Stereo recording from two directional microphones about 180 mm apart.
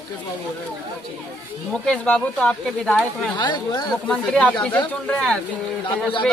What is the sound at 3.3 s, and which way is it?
Speech, 25° left (ahead or behind).